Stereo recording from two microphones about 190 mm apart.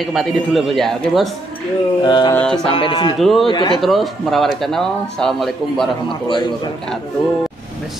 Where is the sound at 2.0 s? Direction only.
20° left (ahead or behind).